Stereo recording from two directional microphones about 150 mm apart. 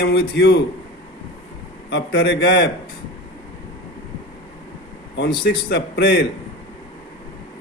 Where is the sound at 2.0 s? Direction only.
90° left.